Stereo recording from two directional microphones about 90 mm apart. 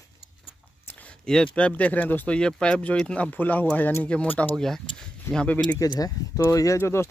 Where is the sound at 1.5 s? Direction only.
15° left (ahead or behind).